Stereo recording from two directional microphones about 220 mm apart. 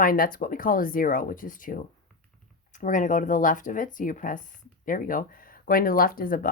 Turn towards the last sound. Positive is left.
turn(degrees=40)  # may be behind; listen again after turning